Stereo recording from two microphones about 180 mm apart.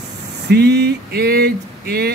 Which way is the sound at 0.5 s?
65° right (ahead or behind).